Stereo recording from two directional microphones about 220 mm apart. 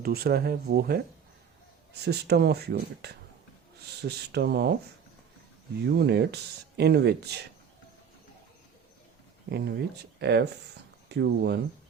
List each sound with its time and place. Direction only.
0.0 s speech: 45° right (ahead or behind)
2.0 s speech: 50° right (ahead or behind)
5.9 s speech: 50° right (ahead or behind)
9.5 s speech: 50° right (ahead or behind)